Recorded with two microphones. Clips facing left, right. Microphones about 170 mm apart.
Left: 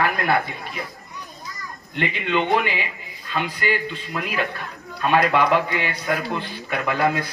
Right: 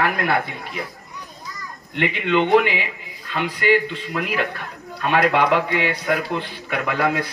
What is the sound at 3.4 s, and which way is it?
A man's voice, 75° right (ahead or behind).